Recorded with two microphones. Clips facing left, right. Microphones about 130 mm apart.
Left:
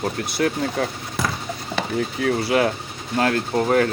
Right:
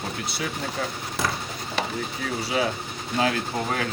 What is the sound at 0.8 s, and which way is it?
Speech, 65° left (ahead or behind).